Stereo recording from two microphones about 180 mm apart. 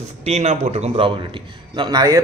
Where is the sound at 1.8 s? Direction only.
20° right (ahead or behind).